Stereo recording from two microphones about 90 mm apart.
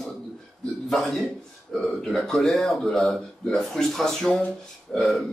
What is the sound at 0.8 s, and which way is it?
Speech, centre (ahead or behind).